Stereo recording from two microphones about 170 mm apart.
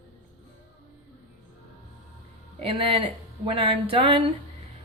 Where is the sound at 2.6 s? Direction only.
30° right (ahead or behind).